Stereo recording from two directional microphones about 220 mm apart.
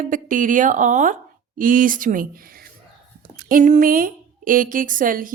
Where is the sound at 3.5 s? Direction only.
35° right (ahead or behind).